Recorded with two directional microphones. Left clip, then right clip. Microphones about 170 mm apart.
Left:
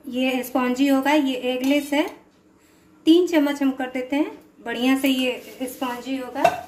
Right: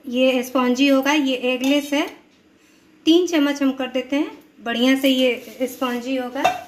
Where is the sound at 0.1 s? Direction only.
20° right (ahead or behind).